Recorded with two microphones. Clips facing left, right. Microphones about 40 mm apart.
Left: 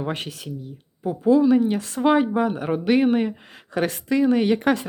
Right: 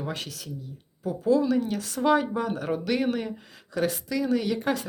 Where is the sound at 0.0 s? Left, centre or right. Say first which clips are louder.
Left 5 dB; left.